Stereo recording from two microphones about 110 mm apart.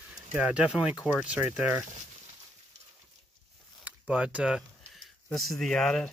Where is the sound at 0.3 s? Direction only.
10° right (ahead or behind).